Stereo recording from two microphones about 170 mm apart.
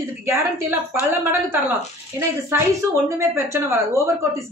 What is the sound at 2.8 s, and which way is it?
Speech, 15° right (ahead or behind).